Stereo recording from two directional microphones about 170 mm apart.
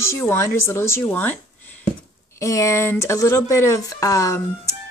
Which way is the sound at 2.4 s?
20° left (ahead or behind).